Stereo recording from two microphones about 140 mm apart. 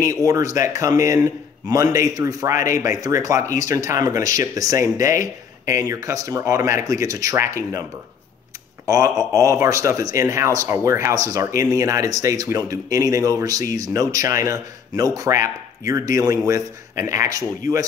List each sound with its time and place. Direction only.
0.0 s speech: 25° right (ahead or behind)
8.8 s speech: 25° right (ahead or behind)